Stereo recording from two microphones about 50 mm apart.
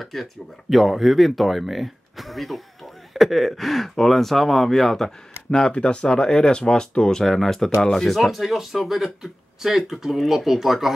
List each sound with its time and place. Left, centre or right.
0.0 s speech: centre